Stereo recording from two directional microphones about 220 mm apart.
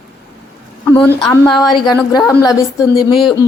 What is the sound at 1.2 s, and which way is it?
Speech, 20° left (ahead or behind).